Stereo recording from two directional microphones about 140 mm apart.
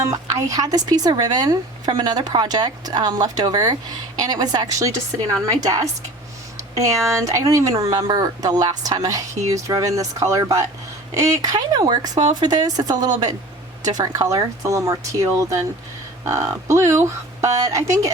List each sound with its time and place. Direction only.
0.0 s speech: 25° right (ahead or behind)